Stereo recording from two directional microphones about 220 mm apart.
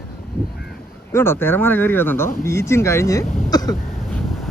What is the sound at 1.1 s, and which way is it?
Speech, 10° left (ahead or behind).